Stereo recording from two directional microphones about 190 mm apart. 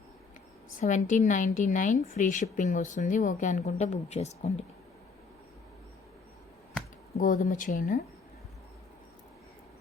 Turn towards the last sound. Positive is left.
turn(degrees=45)  # may be behind; listen again after turning